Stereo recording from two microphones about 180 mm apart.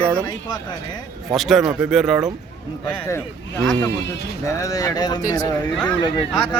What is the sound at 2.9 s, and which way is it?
Speech, 15° left (ahead or behind).